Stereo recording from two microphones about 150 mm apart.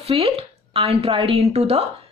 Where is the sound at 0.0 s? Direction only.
40° right (ahead or behind).